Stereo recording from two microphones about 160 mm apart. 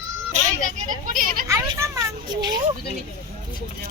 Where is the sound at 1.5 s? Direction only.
20° right (ahead or behind).